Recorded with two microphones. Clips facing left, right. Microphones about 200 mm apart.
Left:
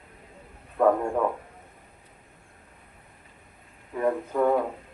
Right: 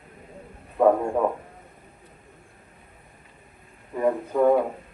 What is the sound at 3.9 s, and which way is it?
Speech, 10° right (ahead or behind).